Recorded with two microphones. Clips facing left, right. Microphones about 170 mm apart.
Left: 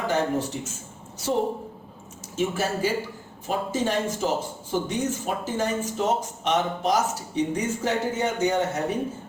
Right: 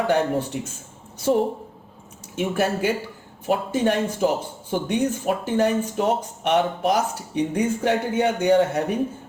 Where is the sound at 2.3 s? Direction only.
60° right (ahead or behind).